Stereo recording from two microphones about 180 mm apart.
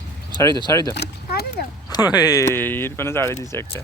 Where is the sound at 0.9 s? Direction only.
60° left (ahead or behind).